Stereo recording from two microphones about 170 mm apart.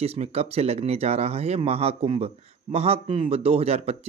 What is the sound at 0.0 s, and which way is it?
Speech, 35° right (ahead or behind).